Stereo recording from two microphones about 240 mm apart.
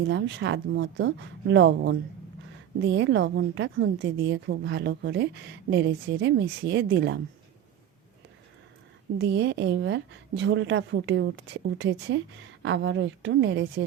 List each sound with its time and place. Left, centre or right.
0.1 s a woman's voice: right
9.1 s a woman's voice: right